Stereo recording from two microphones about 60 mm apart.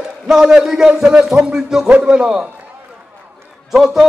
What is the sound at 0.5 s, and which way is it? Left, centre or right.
A man's voice, centre.